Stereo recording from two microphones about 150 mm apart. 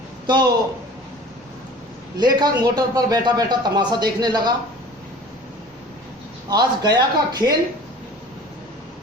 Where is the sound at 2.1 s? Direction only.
25° right (ahead or behind).